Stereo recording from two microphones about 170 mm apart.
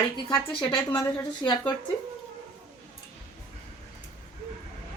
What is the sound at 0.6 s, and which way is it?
Speech, 10° left (ahead or behind).